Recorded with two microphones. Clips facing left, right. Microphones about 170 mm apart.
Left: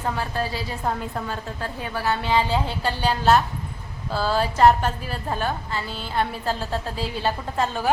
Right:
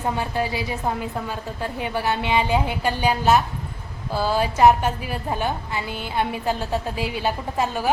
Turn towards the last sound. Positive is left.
turn(degrees=-10)  # may be behind; listen again after turning